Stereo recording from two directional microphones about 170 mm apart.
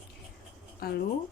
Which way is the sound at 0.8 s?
65° left (ahead or behind).